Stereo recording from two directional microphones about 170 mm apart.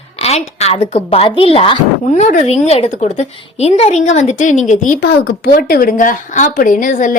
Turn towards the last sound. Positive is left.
turn(degrees=50)  # may be behind; listen again after turning